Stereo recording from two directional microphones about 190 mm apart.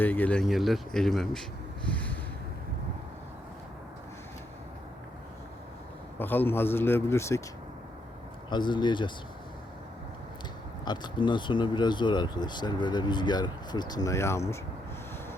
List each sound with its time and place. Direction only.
0.0 s speech: 10° left (ahead or behind)
1.9 s a sound: 5° left (ahead or behind)
6.1 s a man's voice: 10° left (ahead or behind)
8.4 s speech: 25° left (ahead or behind)
10.8 s speech: 25° left (ahead or behind)